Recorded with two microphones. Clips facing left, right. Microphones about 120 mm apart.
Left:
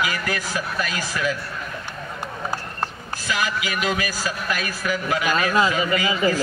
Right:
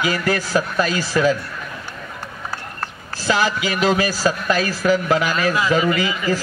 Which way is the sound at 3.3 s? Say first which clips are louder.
Right 6 dB; 30° right (ahead or behind).